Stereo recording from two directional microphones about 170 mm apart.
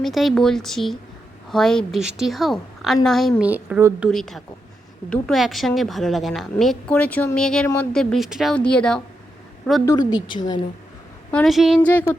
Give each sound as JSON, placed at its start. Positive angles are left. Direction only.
{"t": 0.0, "sound": "a woman's voice", "side_deg": 0}
{"t": 4.1, "sound": "a woman's voice", "side_deg": 0}
{"t": 9.8, "sound": "a woman's voice", "side_deg": 25}
{"t": 11.3, "sound": "a woman's voice", "side_deg": 5}
{"t": 11.8, "sound": "a sound", "side_deg": 10}